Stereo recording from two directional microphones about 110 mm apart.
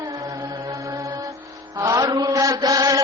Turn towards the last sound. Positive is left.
turn(degrees=-30)  # may be behind; listen again after turning